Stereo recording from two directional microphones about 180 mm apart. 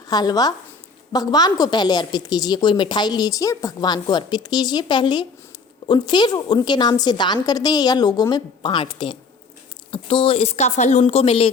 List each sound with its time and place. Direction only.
0.1 s a woman's voice: 20° left (ahead or behind)